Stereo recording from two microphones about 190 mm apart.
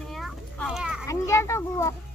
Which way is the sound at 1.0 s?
15° left (ahead or behind).